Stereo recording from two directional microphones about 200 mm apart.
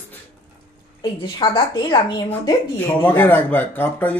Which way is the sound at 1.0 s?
25° left (ahead or behind).